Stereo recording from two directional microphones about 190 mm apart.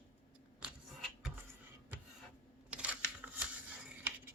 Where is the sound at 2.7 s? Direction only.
5° right (ahead or behind).